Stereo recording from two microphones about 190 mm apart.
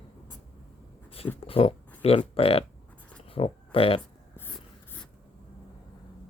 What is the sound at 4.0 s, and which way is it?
Writing, 10° left (ahead or behind).